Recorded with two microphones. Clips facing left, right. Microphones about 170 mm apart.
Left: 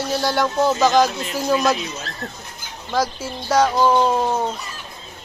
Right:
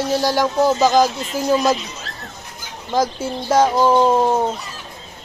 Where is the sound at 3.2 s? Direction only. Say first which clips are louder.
Right 2 dB; 25° right (ahead or behind).